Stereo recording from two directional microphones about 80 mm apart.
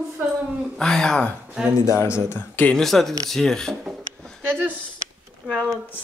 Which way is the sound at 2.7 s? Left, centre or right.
Centre.